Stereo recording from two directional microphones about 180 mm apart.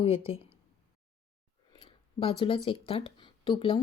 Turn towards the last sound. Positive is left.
turn(degrees=25)  # may be behind; listen again after turning